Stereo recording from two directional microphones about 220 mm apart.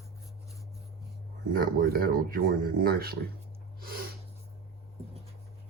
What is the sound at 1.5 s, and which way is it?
Speech, 40° right (ahead or behind).